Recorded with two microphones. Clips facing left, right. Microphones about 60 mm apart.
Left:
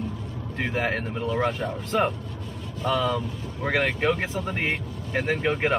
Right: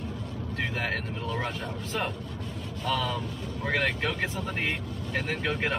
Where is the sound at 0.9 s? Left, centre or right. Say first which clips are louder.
Left 5 dB; centre.